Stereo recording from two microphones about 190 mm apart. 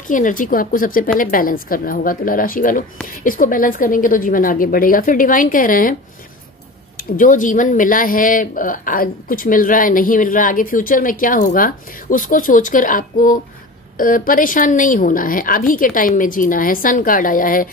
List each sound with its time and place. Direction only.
0.1 s speech: 45° left (ahead or behind)
7.0 s speech: 45° left (ahead or behind)